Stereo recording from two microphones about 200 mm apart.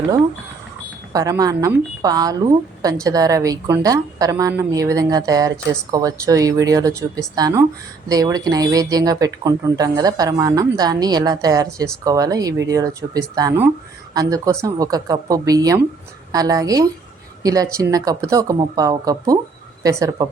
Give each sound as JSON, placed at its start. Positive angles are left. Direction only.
{"t": 1.1, "sound": "a woman's voice", "side_deg": -15}